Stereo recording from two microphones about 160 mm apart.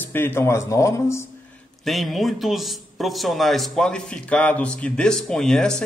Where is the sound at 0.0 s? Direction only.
15° left (ahead or behind).